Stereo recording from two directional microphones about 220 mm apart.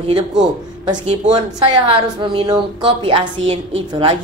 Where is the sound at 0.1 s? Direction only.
35° right (ahead or behind).